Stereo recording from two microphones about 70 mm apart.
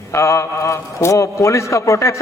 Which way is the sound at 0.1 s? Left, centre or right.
Left.